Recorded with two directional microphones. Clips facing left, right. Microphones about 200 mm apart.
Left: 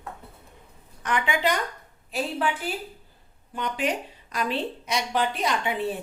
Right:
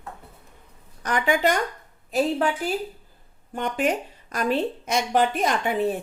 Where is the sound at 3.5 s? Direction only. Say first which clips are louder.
Right 4 dB; 50° right (ahead or behind).